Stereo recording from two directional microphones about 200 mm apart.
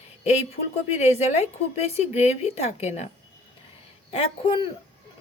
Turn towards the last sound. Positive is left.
turn(degrees=25)  # may be behind; listen again after turning